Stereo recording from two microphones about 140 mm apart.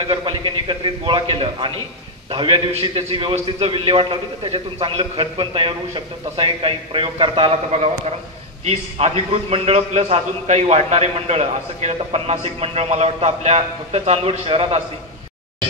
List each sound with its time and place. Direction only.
0.0 s a man's voice: 40° right (ahead or behind)